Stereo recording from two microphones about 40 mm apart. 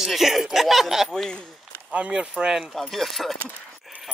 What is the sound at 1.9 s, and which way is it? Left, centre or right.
Speech, right.